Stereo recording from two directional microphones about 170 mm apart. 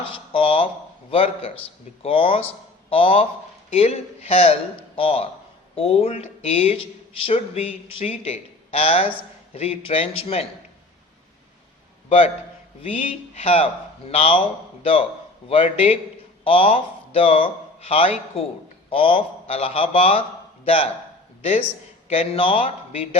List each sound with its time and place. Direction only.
0.0 s speech: 30° left (ahead or behind)
12.0 s a man's voice: 35° left (ahead or behind)
15.4 s speech: 35° left (ahead or behind)
22.1 s speech: 35° left (ahead or behind)